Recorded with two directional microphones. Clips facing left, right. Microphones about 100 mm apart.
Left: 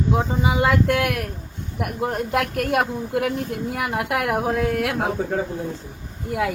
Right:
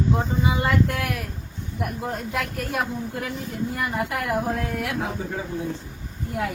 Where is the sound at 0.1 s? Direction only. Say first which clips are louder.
Left 2 dB; 80° left.